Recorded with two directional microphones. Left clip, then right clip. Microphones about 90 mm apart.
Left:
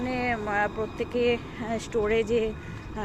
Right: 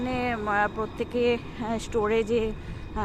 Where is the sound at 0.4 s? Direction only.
30° right (ahead or behind).